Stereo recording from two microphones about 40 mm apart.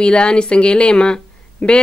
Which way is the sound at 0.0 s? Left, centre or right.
Left.